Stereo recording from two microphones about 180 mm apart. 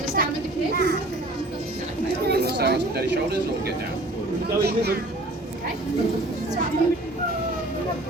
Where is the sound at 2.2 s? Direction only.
60° right (ahead or behind).